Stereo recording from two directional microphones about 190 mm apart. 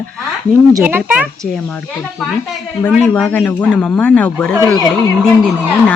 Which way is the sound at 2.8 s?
10° left (ahead or behind).